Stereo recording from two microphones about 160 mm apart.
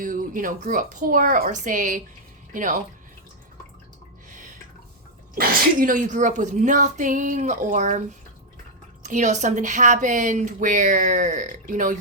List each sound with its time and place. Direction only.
0.0 s speech: 55° right (ahead or behind)
5.3 s speech: 65° right (ahead or behind)
9.0 s speech: 50° right (ahead or behind)